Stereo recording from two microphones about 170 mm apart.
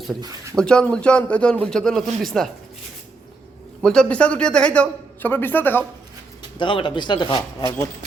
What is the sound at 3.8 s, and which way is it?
A man's voice, 5° left (ahead or behind).